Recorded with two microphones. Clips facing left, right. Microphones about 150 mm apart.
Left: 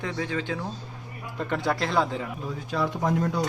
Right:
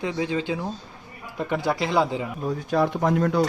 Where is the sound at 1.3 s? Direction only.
5° right (ahead or behind).